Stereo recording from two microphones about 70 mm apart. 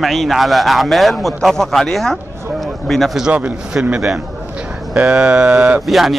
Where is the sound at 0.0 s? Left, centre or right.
Centre.